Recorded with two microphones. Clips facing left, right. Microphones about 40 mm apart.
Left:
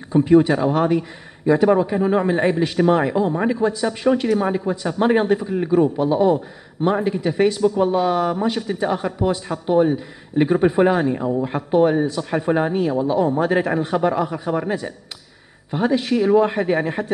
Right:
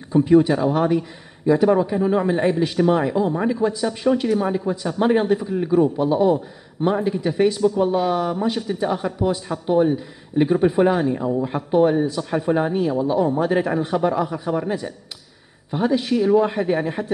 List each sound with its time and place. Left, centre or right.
0.1 s a man's voice: centre
5.9 s a man's voice: centre
15.7 s a man's voice: centre